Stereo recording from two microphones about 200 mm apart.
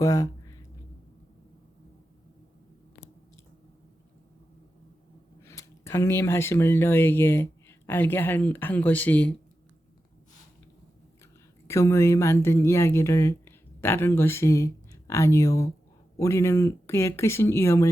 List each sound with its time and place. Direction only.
0.0 s a sound: 15° left (ahead or behind)
5.4 s speech: 15° left (ahead or behind)
11.7 s a woman's voice: 15° left (ahead or behind)